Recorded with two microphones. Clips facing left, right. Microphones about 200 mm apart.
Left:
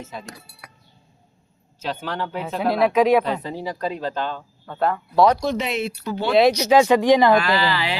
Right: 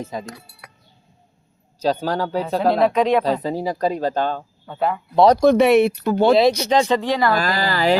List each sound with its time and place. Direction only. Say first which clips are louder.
0.0 s speech: right 6 dB; 40° right (ahead or behind)
1.8 s speech: right 7 dB; 35° right (ahead or behind)
2.6 s speech: right 1 dB; 5° left (ahead or behind)
3.4 s speech: right 6 dB; 40° right (ahead or behind)
4.6 s speech: even; 5° right (ahead or behind)
5.4 s speech: right 11 dB; 55° right (ahead or behind)
6.3 s speech: left 6 dB; 5° left (ahead or behind)
7.3 s speech: left 1 dB; 40° right (ahead or behind)